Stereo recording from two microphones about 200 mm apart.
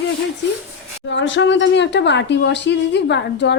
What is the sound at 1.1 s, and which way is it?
Speech, 65° left (ahead or behind).